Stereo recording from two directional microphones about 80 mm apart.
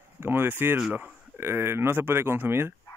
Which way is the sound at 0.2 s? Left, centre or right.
Right.